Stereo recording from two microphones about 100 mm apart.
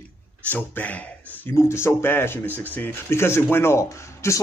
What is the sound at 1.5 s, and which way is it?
Speech, 25° left (ahead or behind).